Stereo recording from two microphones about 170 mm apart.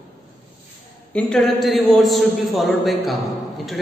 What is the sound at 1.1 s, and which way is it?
A man's voice, 5° left (ahead or behind).